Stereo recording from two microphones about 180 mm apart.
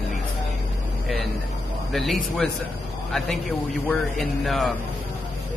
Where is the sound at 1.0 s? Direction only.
Centre (ahead or behind).